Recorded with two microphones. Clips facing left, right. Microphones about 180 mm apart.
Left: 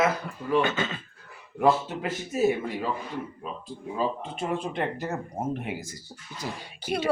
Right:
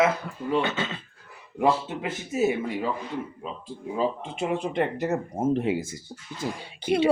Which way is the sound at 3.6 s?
20° right (ahead or behind).